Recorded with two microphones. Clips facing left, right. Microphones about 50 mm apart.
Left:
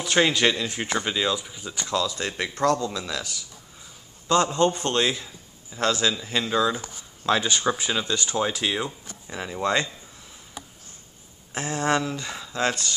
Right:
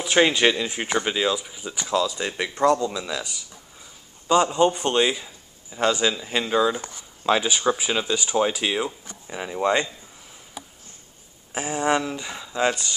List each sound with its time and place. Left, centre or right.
0.0 s a man's voice: centre
11.5 s speech: centre